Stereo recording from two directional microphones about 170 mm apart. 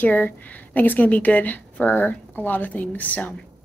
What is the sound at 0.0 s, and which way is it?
A woman's voice, 10° left (ahead or behind).